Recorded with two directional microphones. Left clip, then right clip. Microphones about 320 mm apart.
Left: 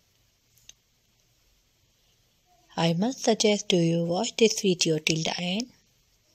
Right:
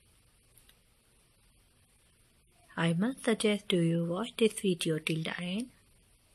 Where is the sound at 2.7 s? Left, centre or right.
Centre.